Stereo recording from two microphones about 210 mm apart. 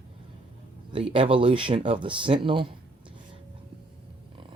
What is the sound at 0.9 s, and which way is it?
Speech, 25° right (ahead or behind).